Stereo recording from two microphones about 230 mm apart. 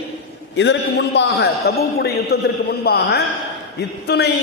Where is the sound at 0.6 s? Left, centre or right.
Left.